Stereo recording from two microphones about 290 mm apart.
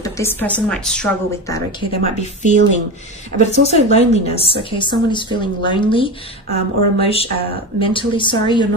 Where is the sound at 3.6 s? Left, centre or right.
Left.